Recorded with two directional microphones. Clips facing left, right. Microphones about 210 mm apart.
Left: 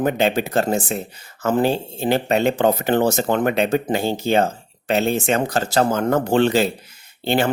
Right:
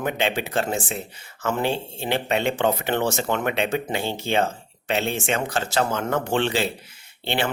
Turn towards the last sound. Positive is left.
turn(degrees=40)  # may be behind; listen again after turning